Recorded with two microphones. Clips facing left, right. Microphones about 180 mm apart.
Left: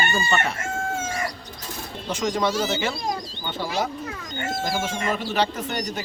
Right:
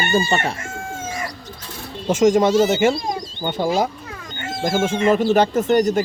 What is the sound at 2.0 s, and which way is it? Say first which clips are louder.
Speech: right 9 dB; 50° right (ahead or behind).